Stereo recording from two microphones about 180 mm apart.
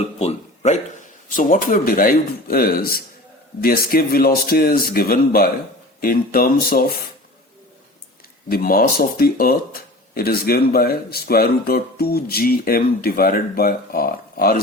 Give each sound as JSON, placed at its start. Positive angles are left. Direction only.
{"t": 0.2, "sound": "a man's voice", "side_deg": 40}
{"t": 8.4, "sound": "speech", "side_deg": 55}